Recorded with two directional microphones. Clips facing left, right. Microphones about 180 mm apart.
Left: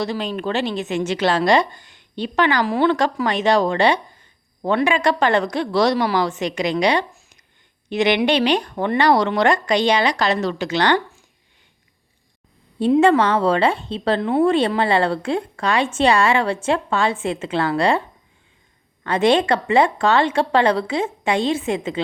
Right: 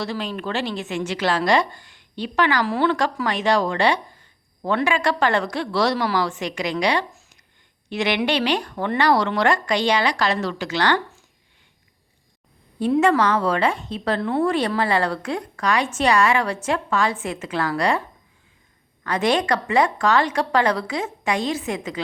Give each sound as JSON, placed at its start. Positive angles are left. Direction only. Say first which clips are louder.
{"t": 0.0, "sound": "a woman's voice", "louder": "left 4 dB", "side_deg": 20}
{"t": 12.8, "sound": "a woman's voice", "louder": "left 3 dB", "side_deg": 25}
{"t": 19.0, "sound": "a woman's voice", "louder": "left 4 dB", "side_deg": 25}